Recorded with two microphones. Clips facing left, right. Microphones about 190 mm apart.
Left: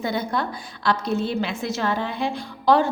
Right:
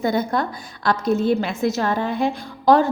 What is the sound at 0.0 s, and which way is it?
A woman's voice, 45° right (ahead or behind).